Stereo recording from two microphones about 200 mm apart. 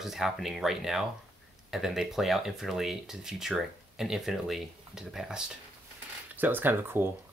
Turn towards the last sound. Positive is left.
turn(degrees=-10)  # may be behind; listen again after turning